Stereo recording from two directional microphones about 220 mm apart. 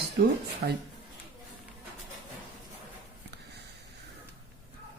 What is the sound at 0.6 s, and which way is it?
Speech, 45° right (ahead or behind).